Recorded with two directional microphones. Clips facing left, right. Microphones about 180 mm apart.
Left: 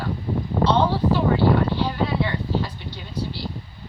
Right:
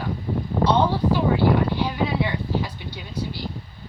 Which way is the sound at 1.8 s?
10° right (ahead or behind).